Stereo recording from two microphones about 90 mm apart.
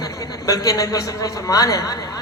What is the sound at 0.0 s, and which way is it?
A man's voice, 40° left (ahead or behind).